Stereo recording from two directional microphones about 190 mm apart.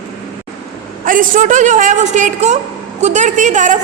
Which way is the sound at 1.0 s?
45° right (ahead or behind).